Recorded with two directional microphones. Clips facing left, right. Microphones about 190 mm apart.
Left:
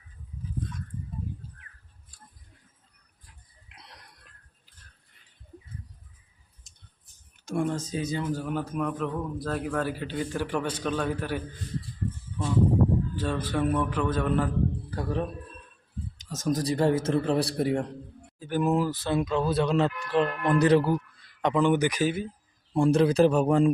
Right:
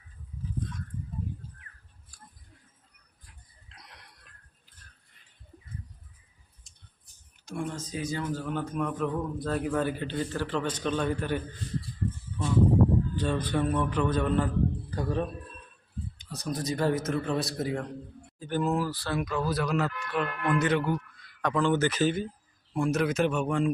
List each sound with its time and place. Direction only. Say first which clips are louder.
3.7 s music: left 1 dB; 15° left (ahead or behind)
7.9 s a man's voice: left 2 dB; 20° left (ahead or behind); by 11.4 s 5° left (ahead or behind)
13.1 s a man's voice: even; centre (ahead or behind)
16.1 s a man's voice: left 7 dB; 45° left (ahead or behind)
18.3 s speech: left 3 dB; 10° left (ahead or behind); by 21.0 s 35° left (ahead or behind)
21.4 s a man's voice: left 3 dB; 20° left (ahead or behind)
22.7 s a man's voice: left 5 dB; 30° left (ahead or behind)